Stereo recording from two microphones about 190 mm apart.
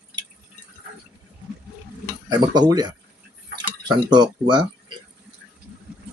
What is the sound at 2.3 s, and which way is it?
Speech, 20° right (ahead or behind).